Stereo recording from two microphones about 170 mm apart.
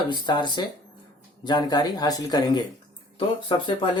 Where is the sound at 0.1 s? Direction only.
25° left (ahead or behind).